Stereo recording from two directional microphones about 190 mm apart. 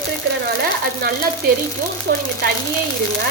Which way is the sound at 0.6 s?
55° right (ahead or behind).